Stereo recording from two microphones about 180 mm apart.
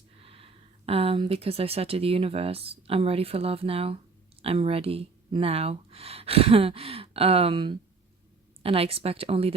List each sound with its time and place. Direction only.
0.2 s speech: 30° right (ahead or behind)